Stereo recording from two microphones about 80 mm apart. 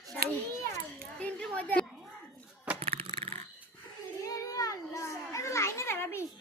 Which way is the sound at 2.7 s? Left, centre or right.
Centre.